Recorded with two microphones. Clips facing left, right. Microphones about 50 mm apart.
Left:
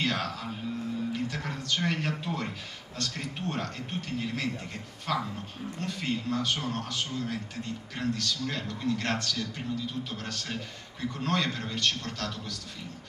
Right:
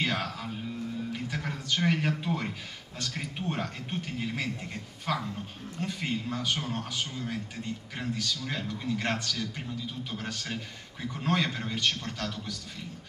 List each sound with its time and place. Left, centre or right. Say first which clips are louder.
0.0 s music: even; centre
3.0 s a man's voice: left 1 dB; centre